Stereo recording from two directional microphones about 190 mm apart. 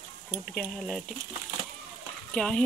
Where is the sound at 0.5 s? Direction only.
5° left (ahead or behind).